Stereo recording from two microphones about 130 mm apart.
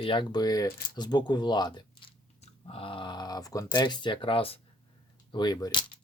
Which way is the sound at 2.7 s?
45° left (ahead or behind).